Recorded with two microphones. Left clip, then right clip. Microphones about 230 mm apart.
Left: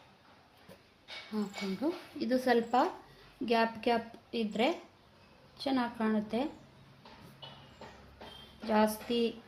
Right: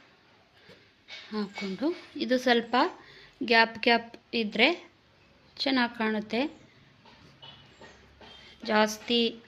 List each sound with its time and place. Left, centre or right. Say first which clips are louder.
1.3 s speech: right 4 dB; right
7.4 s train: right 1 dB; left
8.6 s speech: right 4 dB; right